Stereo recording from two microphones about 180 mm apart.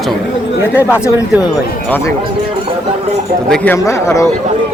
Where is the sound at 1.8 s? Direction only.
10° left (ahead or behind).